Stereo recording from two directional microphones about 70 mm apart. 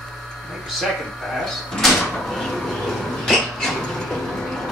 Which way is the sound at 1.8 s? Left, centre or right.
Centre.